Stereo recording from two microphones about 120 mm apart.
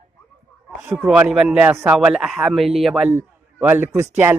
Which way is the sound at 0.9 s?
10° right (ahead or behind).